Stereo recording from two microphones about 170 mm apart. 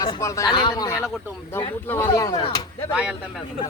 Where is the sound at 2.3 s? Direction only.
30° left (ahead or behind).